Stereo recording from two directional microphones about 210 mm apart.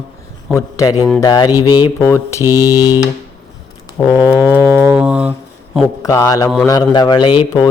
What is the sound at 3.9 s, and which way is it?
Speech, 15° left (ahead or behind).